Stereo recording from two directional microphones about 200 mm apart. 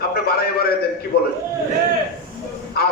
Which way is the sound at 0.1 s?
50° left (ahead or behind).